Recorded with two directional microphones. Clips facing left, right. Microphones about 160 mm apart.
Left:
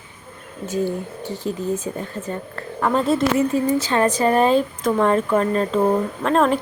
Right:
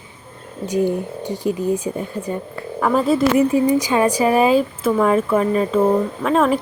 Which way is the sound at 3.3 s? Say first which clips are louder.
Right 4 dB; 15° right (ahead or behind).